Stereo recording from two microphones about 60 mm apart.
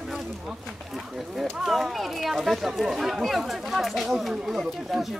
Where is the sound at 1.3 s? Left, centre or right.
Centre.